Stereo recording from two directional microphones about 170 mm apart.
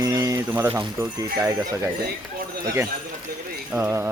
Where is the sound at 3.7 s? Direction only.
15° right (ahead or behind).